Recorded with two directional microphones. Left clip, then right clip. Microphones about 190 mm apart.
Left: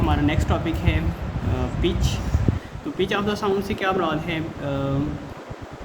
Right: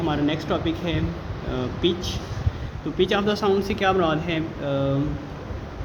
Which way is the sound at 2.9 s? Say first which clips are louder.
Right 2 dB; 20° right (ahead or behind).